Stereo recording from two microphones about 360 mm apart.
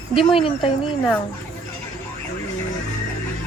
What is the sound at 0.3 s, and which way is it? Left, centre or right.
Speech, centre.